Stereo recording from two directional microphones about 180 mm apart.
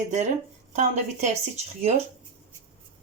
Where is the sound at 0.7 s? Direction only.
40° right (ahead or behind).